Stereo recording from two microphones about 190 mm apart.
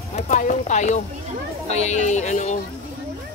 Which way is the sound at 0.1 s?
40° left (ahead or behind).